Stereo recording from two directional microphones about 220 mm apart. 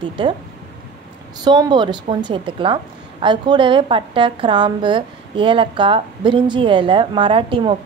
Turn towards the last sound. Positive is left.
turn(degrees=-25)  # may be behind; listen again after turning